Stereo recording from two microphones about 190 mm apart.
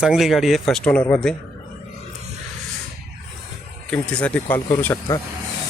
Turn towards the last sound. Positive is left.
turn(degrees=10)  # may be behind; listen again after turning